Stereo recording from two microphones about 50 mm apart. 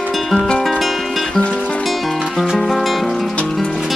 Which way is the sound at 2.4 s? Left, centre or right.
Centre.